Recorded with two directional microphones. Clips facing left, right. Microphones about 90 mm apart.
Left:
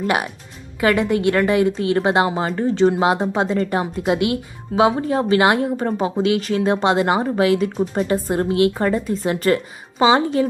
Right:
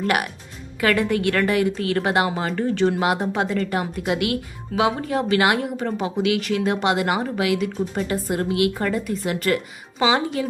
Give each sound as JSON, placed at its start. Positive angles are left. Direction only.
{"t": 0.8, "sound": "a woman's voice", "side_deg": 20}